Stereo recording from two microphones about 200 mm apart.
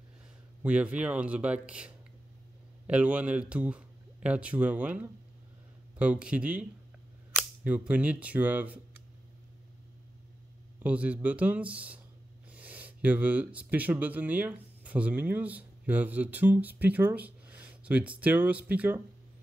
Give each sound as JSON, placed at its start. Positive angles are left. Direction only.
{"t": 0.6, "sound": "speech", "side_deg": -5}
{"t": 10.8, "sound": "speech", "side_deg": -5}